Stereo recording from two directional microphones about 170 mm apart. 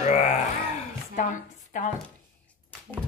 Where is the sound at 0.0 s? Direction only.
40° left (ahead or behind).